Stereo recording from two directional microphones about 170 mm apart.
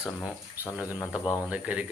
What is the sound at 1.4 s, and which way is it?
Speech, 5° right (ahead or behind).